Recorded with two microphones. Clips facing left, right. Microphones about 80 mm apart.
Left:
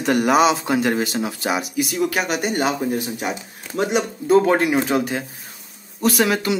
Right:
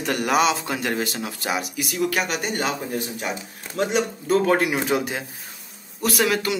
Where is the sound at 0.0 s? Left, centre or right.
Centre.